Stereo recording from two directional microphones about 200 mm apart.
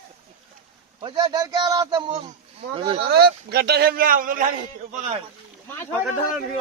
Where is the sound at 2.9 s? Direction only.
50° right (ahead or behind).